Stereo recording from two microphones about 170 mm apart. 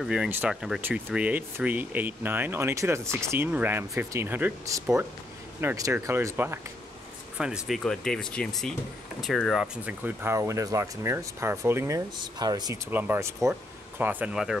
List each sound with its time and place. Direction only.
0.0 s speech: 5° right (ahead or behind)
12.2 s speech: 25° right (ahead or behind)
12.9 s speech: 10° right (ahead or behind)